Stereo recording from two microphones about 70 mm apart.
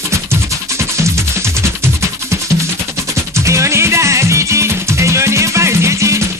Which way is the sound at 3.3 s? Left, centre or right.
Right.